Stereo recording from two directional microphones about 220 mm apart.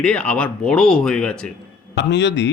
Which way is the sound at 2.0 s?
55° left (ahead or behind).